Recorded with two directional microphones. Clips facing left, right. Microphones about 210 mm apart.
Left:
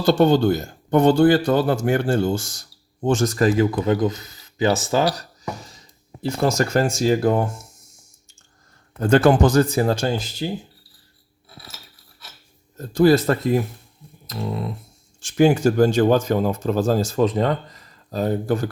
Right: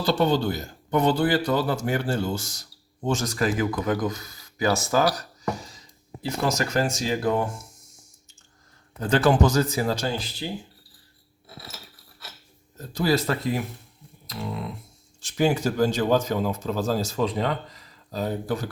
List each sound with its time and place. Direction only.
0.0 s speech: 45° left (ahead or behind)
3.6 s speech: 25° left (ahead or behind)
6.4 s speech: 50° left (ahead or behind)
9.0 s speech: 50° left (ahead or behind)
12.7 s speech: 50° left (ahead or behind)
14.3 s a sound: 40° left (ahead or behind)
15.3 s speech: 50° left (ahead or behind)